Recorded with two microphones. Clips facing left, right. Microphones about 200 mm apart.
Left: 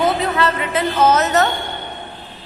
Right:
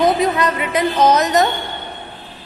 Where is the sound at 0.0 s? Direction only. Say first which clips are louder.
Right 2 dB; 15° right (ahead or behind).